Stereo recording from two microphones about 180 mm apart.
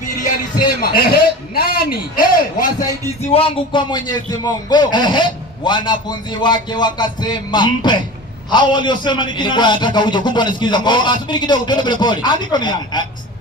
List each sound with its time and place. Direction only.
0.6 s a man's voice: 55° left (ahead or behind)
3.2 s a man's voice: 35° left (ahead or behind)